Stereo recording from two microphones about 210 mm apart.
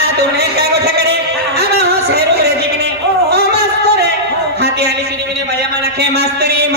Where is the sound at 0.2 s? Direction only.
50° right (ahead or behind).